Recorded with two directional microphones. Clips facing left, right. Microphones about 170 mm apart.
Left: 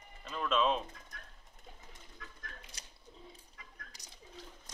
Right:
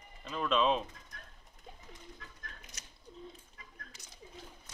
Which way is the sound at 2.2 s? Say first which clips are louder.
Left 1 dB; 30° right (ahead or behind).